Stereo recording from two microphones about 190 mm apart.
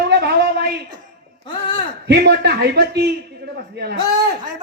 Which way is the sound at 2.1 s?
60° right (ahead or behind).